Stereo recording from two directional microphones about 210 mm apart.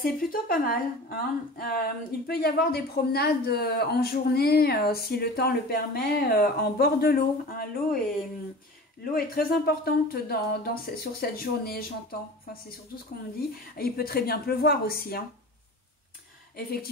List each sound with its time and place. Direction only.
0.0 s a woman's voice: 40° left (ahead or behind)
9.1 s a woman's voice: 45° left (ahead or behind)
13.7 s a woman's voice: 45° left (ahead or behind)
16.5 s a woman's voice: 45° left (ahead or behind)